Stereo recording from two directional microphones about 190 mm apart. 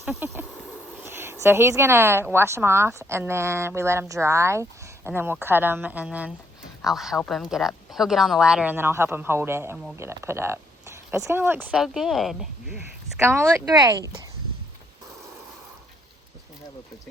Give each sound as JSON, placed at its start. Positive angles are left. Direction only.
{"t": 0.0, "sound": "a woman's voice", "side_deg": -5}
{"t": 13.1, "sound": "a woman's voice", "side_deg": -15}